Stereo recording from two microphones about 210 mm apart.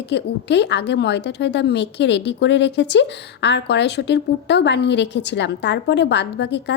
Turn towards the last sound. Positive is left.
turn(degrees=55)  # may be behind; listen again after turning